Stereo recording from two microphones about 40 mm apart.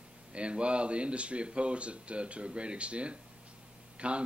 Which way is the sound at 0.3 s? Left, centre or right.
Right.